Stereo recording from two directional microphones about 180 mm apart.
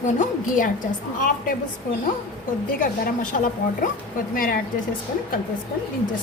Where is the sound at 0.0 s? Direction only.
45° left (ahead or behind).